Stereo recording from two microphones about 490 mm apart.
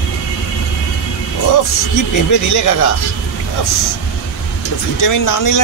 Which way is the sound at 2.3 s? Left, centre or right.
Left.